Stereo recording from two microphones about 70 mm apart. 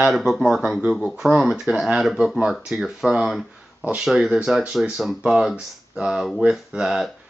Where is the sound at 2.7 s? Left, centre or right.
Centre.